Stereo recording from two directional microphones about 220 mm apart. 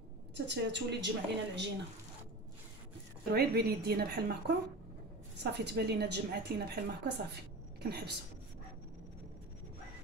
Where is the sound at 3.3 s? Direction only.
45° right (ahead or behind).